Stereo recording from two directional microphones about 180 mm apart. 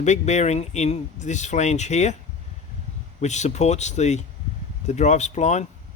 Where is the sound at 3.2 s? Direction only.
40° left (ahead or behind).